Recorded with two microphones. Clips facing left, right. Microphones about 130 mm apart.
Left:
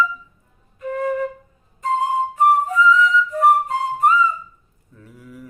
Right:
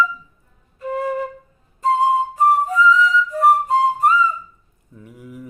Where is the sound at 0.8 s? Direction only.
35° right (ahead or behind).